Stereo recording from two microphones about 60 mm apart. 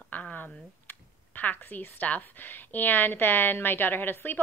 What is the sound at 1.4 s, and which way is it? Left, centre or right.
A woman's voice, left.